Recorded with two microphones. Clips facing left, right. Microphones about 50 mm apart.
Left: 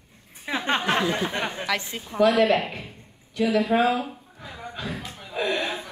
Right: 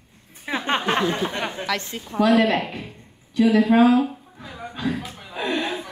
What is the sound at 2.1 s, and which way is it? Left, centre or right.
Speech, right.